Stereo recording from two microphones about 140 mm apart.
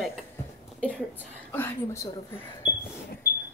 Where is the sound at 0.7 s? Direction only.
10° left (ahead or behind).